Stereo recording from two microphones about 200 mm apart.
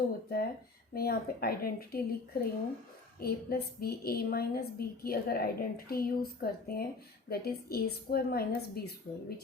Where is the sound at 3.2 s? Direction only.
50° left (ahead or behind).